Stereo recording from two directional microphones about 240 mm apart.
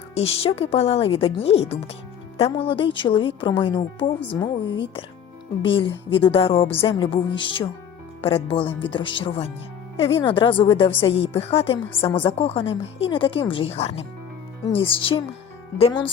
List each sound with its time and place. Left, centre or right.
0.1 s speech: left